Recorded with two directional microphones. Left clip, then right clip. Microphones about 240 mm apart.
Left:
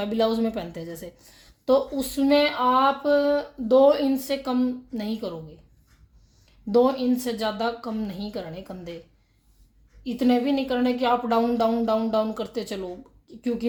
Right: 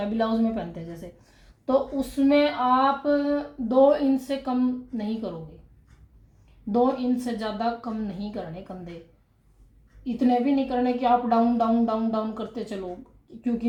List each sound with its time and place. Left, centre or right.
0.1 s speech: left
1.6 s speech: left
6.7 s speech: left
10.0 s speech: left